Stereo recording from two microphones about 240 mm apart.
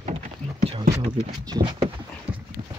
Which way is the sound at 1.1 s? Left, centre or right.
Centre.